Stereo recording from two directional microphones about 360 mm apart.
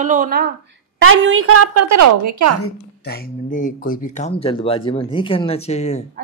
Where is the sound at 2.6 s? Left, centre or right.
Left.